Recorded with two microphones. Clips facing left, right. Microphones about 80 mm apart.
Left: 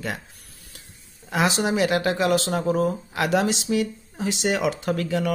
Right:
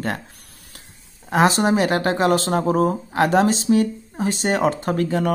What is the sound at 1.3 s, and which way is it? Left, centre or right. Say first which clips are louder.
Speech: right 5 dB; right.